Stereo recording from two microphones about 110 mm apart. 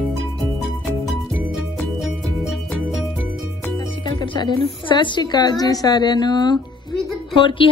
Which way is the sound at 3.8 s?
50° left (ahead or behind).